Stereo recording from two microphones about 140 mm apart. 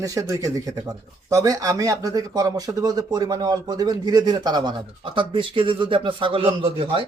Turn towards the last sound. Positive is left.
turn(degrees=-40)  # may be behind; listen again after turning